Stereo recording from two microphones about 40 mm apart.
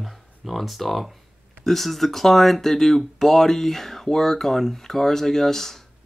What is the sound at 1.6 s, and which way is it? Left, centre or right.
Speech, centre.